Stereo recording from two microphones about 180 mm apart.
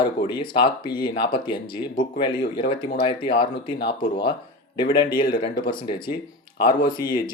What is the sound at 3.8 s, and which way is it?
Speech, 60° left (ahead or behind).